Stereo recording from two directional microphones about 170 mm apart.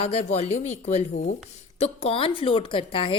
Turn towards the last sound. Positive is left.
turn(degrees=30)  # may be behind; listen again after turning